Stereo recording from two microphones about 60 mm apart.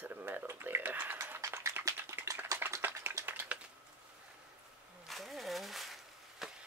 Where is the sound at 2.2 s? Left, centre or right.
Right.